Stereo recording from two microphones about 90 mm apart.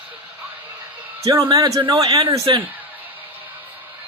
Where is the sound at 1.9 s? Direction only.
45° right (ahead or behind).